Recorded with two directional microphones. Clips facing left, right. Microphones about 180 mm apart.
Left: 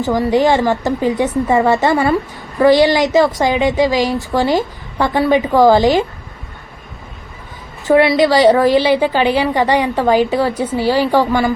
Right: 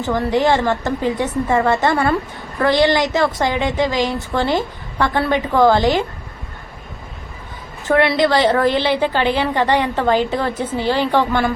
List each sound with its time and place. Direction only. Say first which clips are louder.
0.0 s a woman's voice: left 4 dB; 20° left (ahead or behind)
8.0 s a woman's voice: left 4 dB; 15° left (ahead or behind)